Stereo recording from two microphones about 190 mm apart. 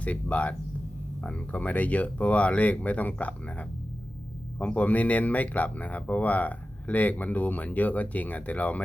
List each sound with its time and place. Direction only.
0.0 s speech: 5° left (ahead or behind)